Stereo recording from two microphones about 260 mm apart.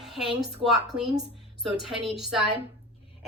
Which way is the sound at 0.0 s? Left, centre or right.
Centre.